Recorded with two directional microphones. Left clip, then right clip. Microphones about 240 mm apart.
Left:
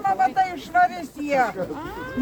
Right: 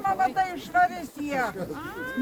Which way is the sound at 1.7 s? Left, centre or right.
Right.